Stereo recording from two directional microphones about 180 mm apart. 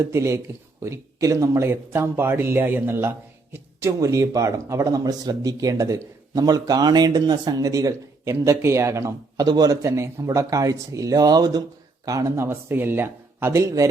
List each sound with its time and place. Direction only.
0.0 s speech: 15° right (ahead or behind)